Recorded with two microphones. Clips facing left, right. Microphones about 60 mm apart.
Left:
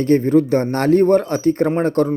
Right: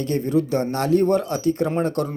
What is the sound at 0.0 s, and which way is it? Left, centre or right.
Speech, left.